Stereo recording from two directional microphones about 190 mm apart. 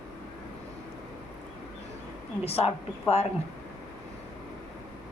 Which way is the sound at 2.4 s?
30° left (ahead or behind).